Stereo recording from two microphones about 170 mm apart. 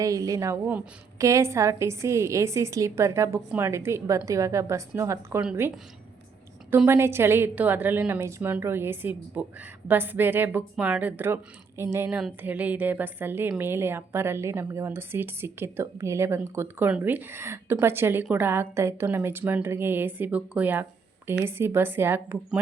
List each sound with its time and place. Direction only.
0.0 s a woman's voice: 20° right (ahead or behind)